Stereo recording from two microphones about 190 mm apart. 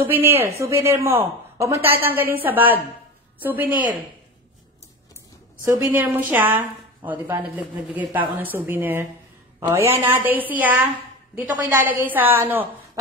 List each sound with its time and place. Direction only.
0.0 s speech: 10° right (ahead or behind)
5.7 s a woman's voice: 10° right (ahead or behind)